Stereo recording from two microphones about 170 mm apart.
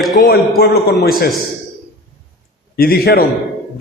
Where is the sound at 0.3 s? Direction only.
65° left (ahead or behind).